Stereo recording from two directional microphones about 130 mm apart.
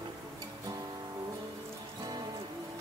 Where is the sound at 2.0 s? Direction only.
30° right (ahead or behind).